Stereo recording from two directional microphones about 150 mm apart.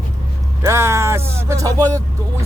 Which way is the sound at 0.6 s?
20° right (ahead or behind).